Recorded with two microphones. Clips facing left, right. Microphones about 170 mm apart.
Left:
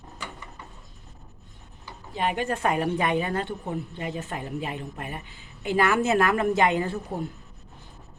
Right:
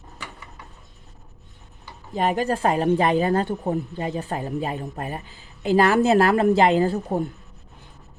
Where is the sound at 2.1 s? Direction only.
40° right (ahead or behind).